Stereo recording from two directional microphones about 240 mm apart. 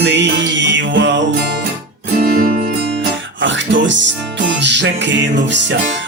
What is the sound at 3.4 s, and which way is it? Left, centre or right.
Music, right.